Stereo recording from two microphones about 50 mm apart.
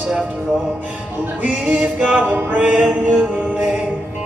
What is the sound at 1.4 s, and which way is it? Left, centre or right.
Music, right.